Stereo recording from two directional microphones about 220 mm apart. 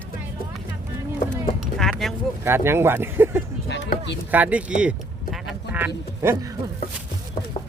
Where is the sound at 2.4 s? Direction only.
10° right (ahead or behind).